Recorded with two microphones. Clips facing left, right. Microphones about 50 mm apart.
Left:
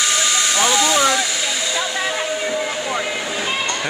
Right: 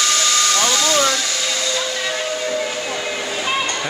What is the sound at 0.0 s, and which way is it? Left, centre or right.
Hair dryer, centre.